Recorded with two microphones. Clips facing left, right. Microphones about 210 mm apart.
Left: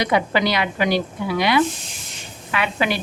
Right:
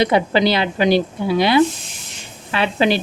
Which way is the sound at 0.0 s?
30° right (ahead or behind).